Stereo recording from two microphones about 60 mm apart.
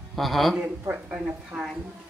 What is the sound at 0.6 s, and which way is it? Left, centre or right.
Speech, right.